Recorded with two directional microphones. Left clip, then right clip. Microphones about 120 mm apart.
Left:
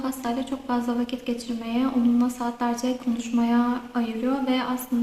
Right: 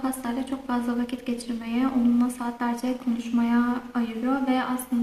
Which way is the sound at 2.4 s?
20° left (ahead or behind).